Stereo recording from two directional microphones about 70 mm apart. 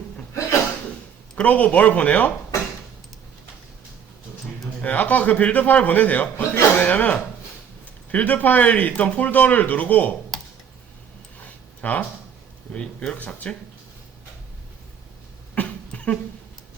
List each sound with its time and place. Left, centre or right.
1.4 s a man's voice: centre
4.8 s a man's voice: left
6.3 s a man's voice: left
6.7 s a man's voice: left
11.3 s a sound: left
12.7 s speech: centre
15.5 s cough: centre